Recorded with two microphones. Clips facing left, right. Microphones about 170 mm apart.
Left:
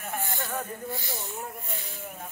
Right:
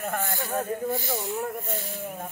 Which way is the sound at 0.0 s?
60° right (ahead or behind).